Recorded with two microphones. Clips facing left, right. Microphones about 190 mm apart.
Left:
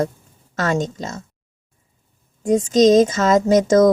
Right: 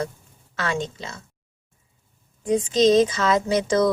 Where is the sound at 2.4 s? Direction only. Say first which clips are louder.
Left 5 dB; 45° left (ahead or behind).